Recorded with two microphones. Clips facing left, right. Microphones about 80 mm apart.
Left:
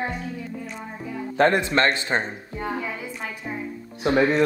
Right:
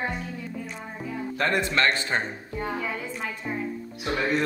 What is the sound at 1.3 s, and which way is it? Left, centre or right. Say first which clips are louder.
Speech: left 6 dB; left.